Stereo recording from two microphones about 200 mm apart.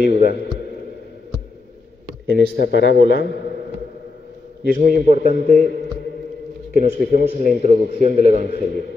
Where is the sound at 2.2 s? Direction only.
60° left (ahead or behind).